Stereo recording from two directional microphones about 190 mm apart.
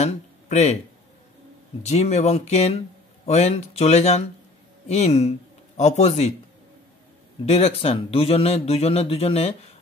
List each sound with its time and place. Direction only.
0.0 s speech: 35° left (ahead or behind)
1.9 s a man's voice: 35° left (ahead or behind)
7.4 s a man's voice: 35° left (ahead or behind)